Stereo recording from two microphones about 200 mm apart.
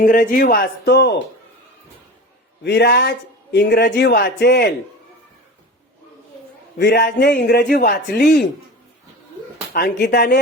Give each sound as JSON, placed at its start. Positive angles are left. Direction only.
{"t": 0.0, "sound": "a man's voice", "side_deg": 45}
{"t": 2.6, "sound": "a man's voice", "side_deg": 55}
{"t": 6.7, "sound": "a man's voice", "side_deg": 55}
{"t": 9.7, "sound": "a man's voice", "side_deg": 55}